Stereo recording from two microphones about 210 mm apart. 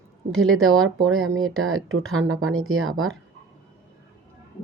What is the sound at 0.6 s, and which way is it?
Speech, 80° right.